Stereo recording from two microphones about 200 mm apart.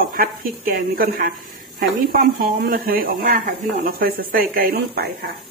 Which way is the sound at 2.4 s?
45° right (ahead or behind).